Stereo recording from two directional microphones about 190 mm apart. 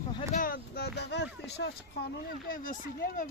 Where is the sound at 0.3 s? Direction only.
50° left (ahead or behind).